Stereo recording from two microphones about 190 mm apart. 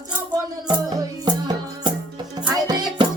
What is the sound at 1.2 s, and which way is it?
Music, 20° right (ahead or behind).